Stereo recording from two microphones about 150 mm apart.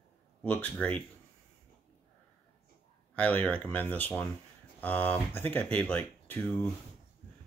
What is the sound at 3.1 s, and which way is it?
Speech, 10° left (ahead or behind).